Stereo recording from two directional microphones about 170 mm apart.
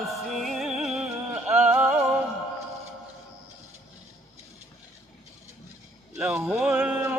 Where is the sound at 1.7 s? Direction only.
5° right (ahead or behind).